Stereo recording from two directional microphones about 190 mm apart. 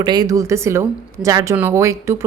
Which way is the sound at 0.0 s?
20° right (ahead or behind).